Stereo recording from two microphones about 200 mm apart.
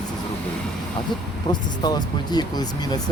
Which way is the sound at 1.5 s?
20° left (ahead or behind).